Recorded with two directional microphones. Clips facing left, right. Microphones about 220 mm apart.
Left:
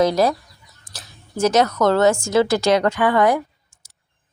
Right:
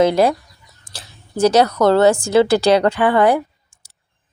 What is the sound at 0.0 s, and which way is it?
Speech, 30° right (ahead or behind).